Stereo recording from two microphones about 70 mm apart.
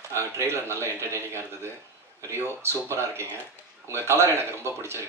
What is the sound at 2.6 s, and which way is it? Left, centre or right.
Speech, right.